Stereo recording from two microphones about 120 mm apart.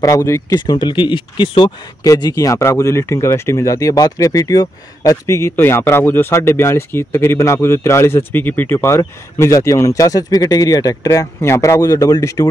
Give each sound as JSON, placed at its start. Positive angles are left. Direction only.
{"t": 0.0, "sound": "speech", "side_deg": 30}
{"t": 0.7, "sound": "speech", "side_deg": 40}
{"t": 2.0, "sound": "speech", "side_deg": 30}